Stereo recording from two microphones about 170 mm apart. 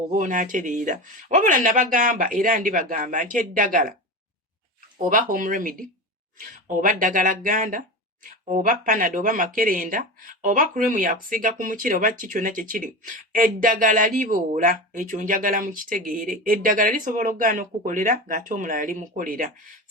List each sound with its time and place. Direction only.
0.1 s speech: 50° right (ahead or behind)
5.3 s speech: 50° right (ahead or behind)